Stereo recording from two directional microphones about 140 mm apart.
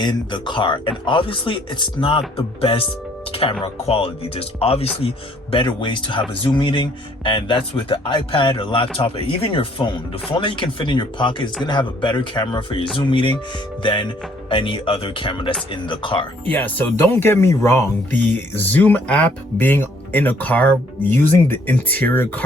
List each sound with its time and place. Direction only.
0.0 s speech: 35° left (ahead or behind)
16.5 s speech: 15° left (ahead or behind)